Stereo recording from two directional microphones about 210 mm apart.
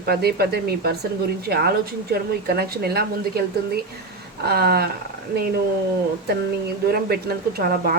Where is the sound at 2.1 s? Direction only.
50° right (ahead or behind).